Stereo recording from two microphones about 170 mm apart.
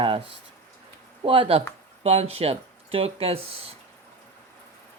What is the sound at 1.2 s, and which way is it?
Speech, 30° right (ahead or behind).